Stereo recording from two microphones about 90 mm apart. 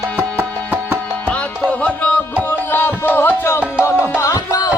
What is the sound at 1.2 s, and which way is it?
Music, 15° left (ahead or behind).